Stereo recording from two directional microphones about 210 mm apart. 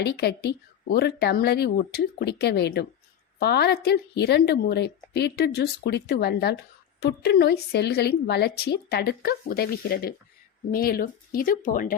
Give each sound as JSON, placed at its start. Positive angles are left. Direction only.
{"t": 0.0, "sound": "a woman's voice", "side_deg": 50}